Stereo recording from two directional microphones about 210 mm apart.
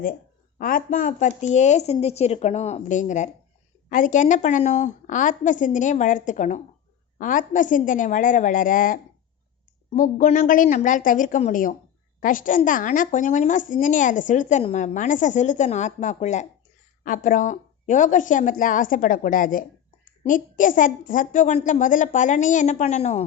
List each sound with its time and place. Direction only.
0.6 s a woman's voice: 40° left (ahead or behind)